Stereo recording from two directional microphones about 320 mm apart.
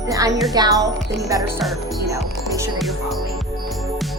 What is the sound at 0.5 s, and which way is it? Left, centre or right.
Speech, centre.